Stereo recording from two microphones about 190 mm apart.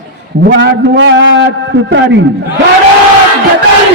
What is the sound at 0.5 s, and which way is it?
A man's voice, 70° right (ahead or behind).